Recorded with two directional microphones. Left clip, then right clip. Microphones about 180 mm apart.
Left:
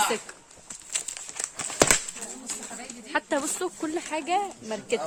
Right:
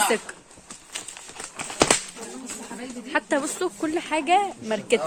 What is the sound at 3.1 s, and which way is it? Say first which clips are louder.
A woman's voice: right 3 dB; 15° left (ahead or behind).